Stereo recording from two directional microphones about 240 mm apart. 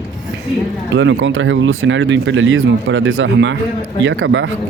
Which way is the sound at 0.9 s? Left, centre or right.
Right.